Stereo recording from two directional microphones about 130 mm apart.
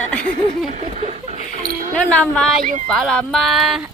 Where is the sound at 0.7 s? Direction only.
60° right (ahead or behind); by 1.9 s 75° right (ahead or behind).